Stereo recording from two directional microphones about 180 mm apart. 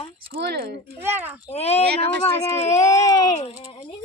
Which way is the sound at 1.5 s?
35° left (ahead or behind).